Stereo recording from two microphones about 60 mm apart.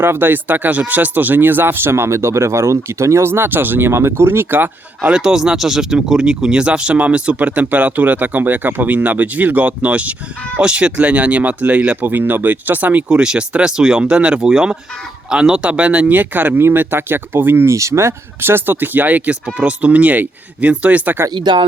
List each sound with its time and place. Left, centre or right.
0.0 s speech: right
5.1 s speech: centre; by 13.1 s right
13.1 s speech: centre; by 17.7 s right
17.7 s speech: right